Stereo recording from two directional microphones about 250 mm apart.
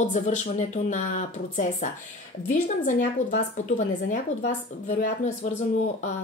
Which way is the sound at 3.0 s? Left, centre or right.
Left.